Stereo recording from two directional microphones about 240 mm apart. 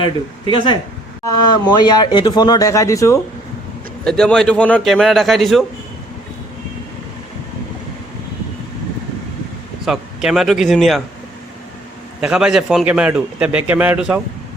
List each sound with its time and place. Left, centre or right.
0.0 s speech: centre
4.0 s a man's voice: centre
9.8 s a man's voice: centre
12.2 s a man's voice: centre